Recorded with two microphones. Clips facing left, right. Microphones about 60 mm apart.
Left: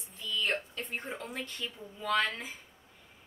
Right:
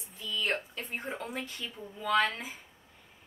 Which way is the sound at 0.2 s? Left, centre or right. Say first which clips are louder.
Even; centre.